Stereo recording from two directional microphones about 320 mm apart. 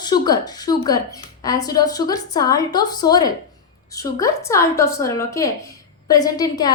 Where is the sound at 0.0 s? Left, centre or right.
Centre.